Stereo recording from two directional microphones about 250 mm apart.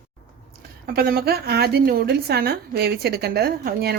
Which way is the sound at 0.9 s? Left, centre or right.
Right.